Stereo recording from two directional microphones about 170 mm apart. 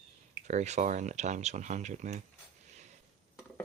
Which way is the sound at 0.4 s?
45° right (ahead or behind).